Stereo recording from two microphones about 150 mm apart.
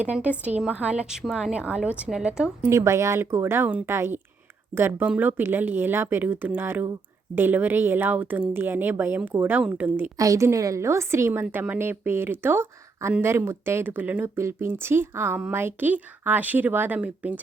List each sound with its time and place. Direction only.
0.0 s speech: 10° right (ahead or behind)
2.6 s speech: 20° right (ahead or behind)
10.2 s a woman's voice: 20° right (ahead or behind)